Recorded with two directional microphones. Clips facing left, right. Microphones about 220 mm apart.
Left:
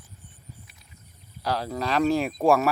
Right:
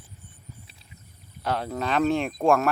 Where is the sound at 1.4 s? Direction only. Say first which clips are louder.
Even; centre (ahead or behind).